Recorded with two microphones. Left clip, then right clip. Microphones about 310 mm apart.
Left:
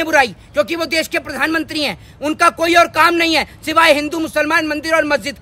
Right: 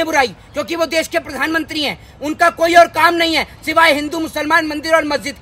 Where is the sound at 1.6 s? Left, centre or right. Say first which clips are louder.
Even; left.